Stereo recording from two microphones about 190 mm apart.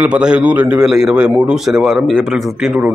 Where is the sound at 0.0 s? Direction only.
5° right (ahead or behind).